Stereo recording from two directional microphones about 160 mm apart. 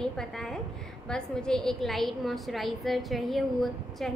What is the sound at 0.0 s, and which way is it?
A woman's voice, 5° left (ahead or behind).